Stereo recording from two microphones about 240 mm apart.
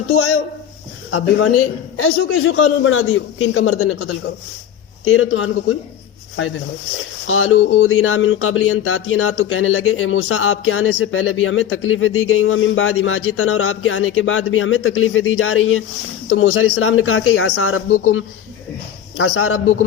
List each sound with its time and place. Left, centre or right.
0.1 s speech: left